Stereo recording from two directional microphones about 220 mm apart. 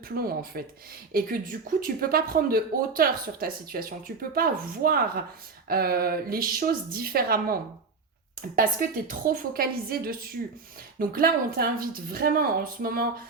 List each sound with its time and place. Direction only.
0.2 s speech: 45° right (ahead or behind)